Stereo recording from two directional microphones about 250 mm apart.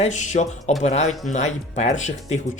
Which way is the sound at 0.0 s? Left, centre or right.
Left.